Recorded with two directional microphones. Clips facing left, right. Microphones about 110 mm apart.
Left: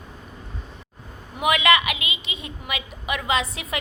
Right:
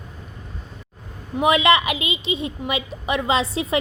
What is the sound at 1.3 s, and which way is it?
A woman's voice, 30° right (ahead or behind).